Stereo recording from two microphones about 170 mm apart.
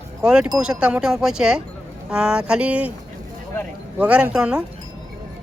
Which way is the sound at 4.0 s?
5° right (ahead or behind).